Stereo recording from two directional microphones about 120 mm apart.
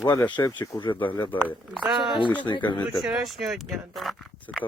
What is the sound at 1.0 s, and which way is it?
Speech, 40° left (ahead or behind).